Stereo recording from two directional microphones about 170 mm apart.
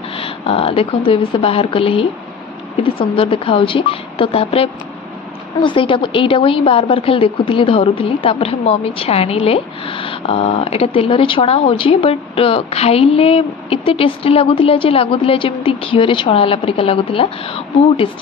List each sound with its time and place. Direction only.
0.1 s a woman's voice: 35° left (ahead or behind)